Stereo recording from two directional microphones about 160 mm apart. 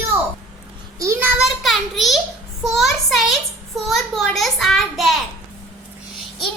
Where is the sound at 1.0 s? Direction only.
20° right (ahead or behind).